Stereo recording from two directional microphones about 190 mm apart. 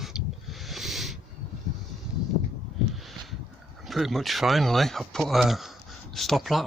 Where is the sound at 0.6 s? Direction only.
Centre (ahead or behind).